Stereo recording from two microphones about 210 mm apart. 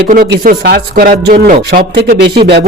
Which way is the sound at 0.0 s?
45° right (ahead or behind).